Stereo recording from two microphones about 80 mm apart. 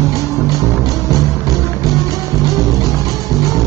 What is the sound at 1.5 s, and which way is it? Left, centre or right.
Music, centre.